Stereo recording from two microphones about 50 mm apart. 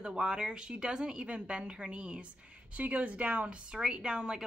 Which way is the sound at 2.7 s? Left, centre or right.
Right.